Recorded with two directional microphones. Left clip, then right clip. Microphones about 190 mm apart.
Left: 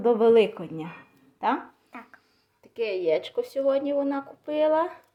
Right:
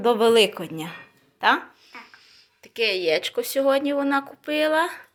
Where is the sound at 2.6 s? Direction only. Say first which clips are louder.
Right 3 dB; centre (ahead or behind).